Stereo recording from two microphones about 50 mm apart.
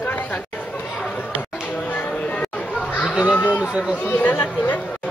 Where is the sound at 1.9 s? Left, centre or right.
Left.